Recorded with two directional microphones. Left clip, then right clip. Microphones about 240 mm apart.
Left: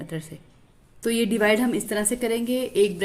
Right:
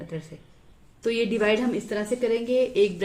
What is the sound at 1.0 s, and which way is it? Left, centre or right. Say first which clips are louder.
A woman's voice: left 1 dB; left.